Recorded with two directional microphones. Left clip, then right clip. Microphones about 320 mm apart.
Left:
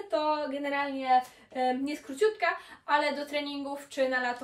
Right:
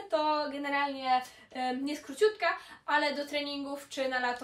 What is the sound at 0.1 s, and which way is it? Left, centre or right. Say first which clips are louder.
Speech: even; centre.